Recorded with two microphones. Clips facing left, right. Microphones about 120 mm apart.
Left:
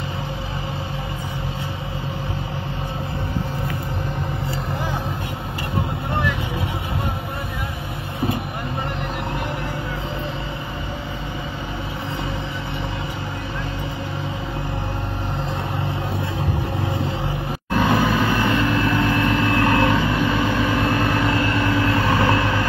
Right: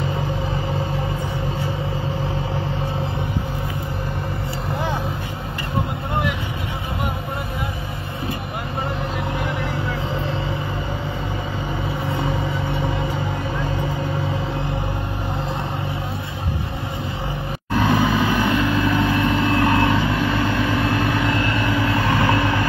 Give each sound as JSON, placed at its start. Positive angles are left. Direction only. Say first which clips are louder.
{"t": 17.7, "sound": "vehicle", "louder": "even", "side_deg": 0}
{"t": 18.9, "sound": "vehicle", "louder": "even", "side_deg": -15}
{"t": 21.1, "sound": "vehicle", "louder": "left 1 dB", "side_deg": 0}